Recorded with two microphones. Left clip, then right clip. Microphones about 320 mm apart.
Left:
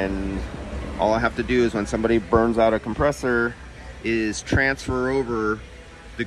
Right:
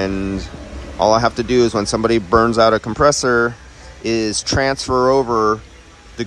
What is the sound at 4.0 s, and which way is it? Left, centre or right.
A man's voice, centre.